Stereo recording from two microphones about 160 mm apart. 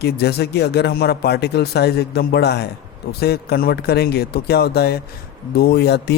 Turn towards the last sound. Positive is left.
turn(degrees=90)